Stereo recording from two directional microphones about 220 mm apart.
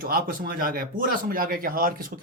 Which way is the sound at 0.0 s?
40° right (ahead or behind).